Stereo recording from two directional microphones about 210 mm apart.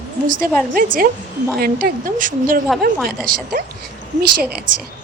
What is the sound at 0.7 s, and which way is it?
Speech, 40° right (ahead or behind).